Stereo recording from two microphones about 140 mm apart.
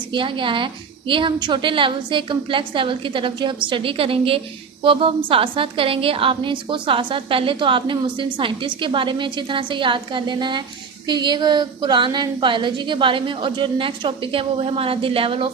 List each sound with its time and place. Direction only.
0.1 s a woman's voice: 35° right (ahead or behind)